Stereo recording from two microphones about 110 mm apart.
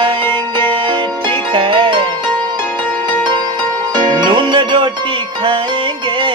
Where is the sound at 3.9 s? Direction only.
40° right (ahead or behind).